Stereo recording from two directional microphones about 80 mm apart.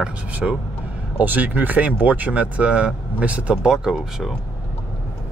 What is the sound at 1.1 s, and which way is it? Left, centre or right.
Speech, right.